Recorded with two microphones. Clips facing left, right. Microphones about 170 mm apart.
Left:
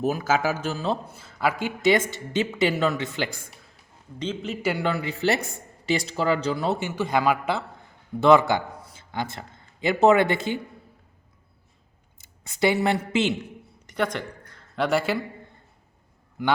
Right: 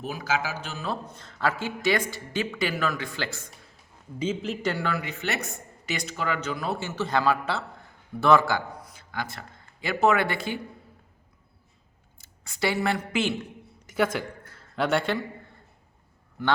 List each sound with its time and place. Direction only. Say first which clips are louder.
0.0 s speech: left 6 dB; 45° left (ahead or behind)
1.0 s speech: left 2 dB; 5° left (ahead or behind)
4.2 s a man's voice: right 1 dB; 5° right (ahead or behind)
4.6 s speech: left 4 dB; 10° left (ahead or behind)
4.9 s speech: left 6 dB; 30° left (ahead or behind)
12.1 s speech: left 2 dB; 20° left (ahead or behind)
13.8 s a sound: right 1 dB; 5° right (ahead or behind)
16.4 s speech: left 2 dB; 15° left (ahead or behind)